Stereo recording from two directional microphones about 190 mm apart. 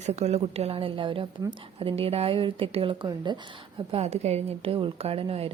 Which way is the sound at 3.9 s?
35° right (ahead or behind).